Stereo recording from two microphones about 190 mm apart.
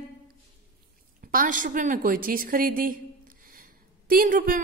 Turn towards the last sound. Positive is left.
turn(degrees=-45)  # may be behind; listen again after turning